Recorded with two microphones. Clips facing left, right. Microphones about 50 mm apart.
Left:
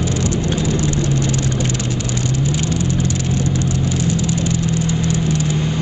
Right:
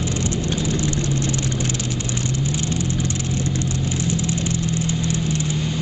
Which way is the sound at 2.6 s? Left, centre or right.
Right.